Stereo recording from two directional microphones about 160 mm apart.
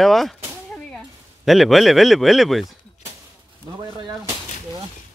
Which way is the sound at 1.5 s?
Centre (ahead or behind).